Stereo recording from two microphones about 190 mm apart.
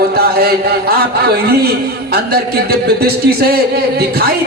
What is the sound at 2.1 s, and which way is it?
Speech, 55° right (ahead or behind).